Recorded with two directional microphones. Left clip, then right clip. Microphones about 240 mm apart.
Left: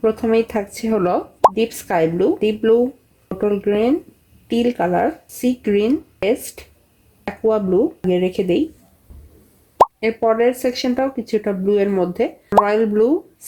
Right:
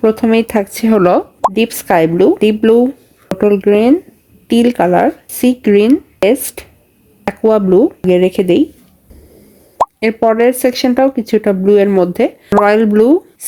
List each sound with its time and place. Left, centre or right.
0.0 s speech: right
10.0 s speech: right